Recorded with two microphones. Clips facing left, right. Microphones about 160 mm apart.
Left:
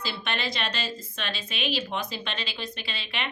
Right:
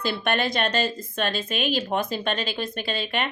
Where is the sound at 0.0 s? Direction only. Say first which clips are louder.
Right 7 dB; 50° right (ahead or behind).